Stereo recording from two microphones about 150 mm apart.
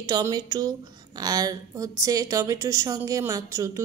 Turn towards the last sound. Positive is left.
turn(degrees=-20)  # may be behind; listen again after turning